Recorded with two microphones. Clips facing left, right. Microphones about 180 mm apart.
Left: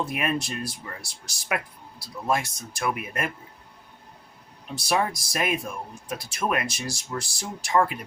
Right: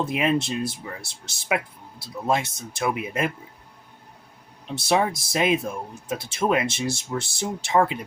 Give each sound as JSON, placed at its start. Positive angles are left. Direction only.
{"t": 0.0, "sound": "speech", "side_deg": -20}
{"t": 4.7, "sound": "speech", "side_deg": -25}